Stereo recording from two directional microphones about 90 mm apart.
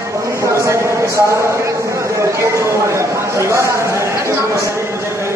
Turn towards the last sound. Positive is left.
turn(degrees=-30)  # may be behind; listen again after turning